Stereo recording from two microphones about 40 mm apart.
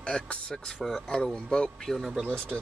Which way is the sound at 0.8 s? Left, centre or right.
Centre.